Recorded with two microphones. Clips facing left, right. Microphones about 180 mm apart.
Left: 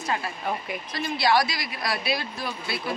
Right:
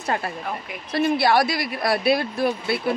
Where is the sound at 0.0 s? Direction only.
55° right (ahead or behind).